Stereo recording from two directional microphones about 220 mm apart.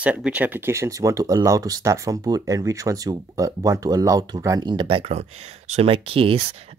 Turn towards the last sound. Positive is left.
turn(degrees=-25)  # may be behind; listen again after turning